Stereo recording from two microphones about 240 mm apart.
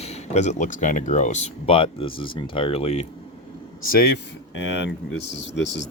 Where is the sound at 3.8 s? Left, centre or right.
Left.